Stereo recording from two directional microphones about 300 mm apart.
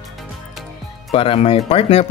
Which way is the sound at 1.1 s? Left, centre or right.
Centre.